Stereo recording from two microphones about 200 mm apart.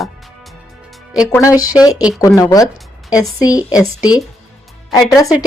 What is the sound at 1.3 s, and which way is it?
Speech, 15° left (ahead or behind).